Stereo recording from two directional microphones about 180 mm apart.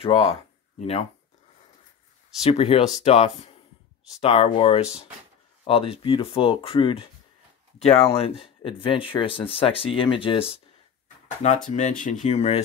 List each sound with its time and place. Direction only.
0.0 s speech: 35° left (ahead or behind)
2.5 s speech: 30° left (ahead or behind)
11.7 s speech: 45° left (ahead or behind)